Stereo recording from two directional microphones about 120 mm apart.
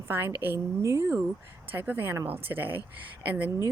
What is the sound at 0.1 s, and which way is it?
Speech, 20° right (ahead or behind).